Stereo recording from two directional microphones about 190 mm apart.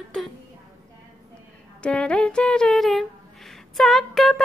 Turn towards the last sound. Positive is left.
turn(degrees=0)  # may be behind; listen again after turning